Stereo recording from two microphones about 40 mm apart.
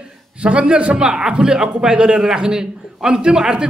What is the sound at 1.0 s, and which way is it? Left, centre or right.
A man's voice, centre.